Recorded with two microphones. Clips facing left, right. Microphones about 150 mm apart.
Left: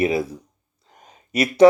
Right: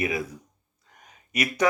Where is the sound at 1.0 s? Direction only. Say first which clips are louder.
Left 6 dB; 30° left (ahead or behind).